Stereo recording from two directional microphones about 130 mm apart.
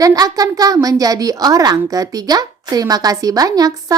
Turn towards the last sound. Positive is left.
turn(degrees=-30)  # may be behind; listen again after turning